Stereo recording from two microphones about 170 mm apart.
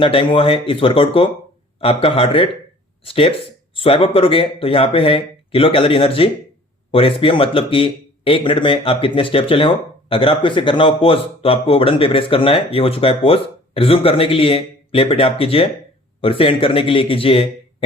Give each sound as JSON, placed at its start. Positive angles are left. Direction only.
{"t": 0.0, "sound": "speech", "side_deg": 30}